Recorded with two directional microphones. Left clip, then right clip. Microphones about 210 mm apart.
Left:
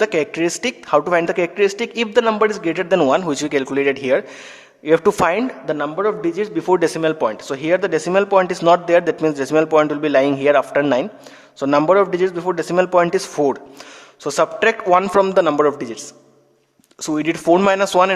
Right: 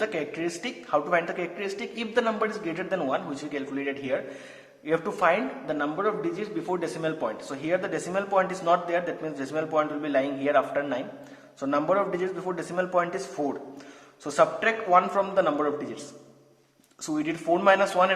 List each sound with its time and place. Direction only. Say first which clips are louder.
0.0 s a man's voice: left 11 dB; 50° left (ahead or behind)
17.1 s a man's voice: left 10 dB; 45° left (ahead or behind)